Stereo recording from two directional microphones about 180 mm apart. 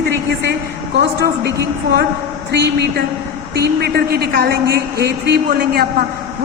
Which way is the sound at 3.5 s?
60° right (ahead or behind).